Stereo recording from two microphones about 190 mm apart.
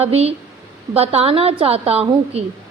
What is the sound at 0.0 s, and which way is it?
A woman's voice, 30° right (ahead or behind).